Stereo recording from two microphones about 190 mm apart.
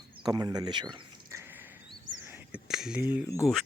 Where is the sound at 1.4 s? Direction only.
10° right (ahead or behind).